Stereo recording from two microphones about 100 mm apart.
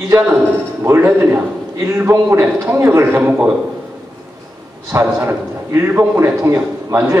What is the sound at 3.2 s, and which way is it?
Speech, 10° right (ahead or behind).